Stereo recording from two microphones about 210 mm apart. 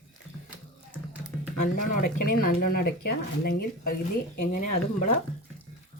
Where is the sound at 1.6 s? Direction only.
45° left (ahead or behind).